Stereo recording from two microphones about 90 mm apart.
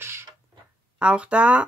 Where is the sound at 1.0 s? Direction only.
15° right (ahead or behind).